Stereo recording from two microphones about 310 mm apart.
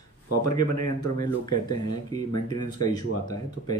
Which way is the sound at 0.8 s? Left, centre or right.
Right.